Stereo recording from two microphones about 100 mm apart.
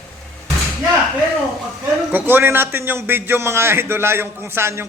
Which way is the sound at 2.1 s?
20° right (ahead or behind).